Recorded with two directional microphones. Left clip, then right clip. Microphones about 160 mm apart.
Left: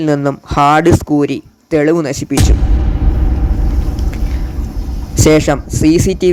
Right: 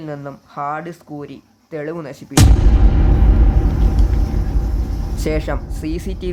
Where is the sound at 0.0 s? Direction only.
45° left (ahead or behind).